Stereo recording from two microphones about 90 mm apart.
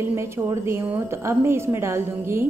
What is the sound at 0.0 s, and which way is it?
A woman's voice, 25° right (ahead or behind).